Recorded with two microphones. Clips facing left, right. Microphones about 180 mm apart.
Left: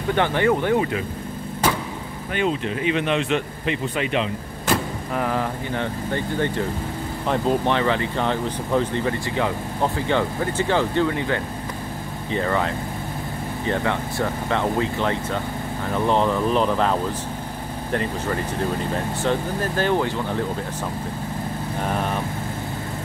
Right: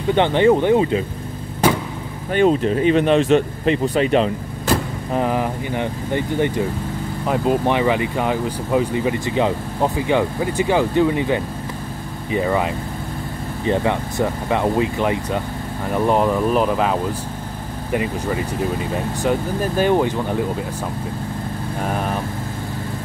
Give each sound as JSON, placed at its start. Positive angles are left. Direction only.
{"t": 0.1, "sound": "speech", "side_deg": -20}
{"t": 2.3, "sound": "speech", "side_deg": -40}
{"t": 5.1, "sound": "speech", "side_deg": -20}
{"t": 21.8, "sound": "speech", "side_deg": -5}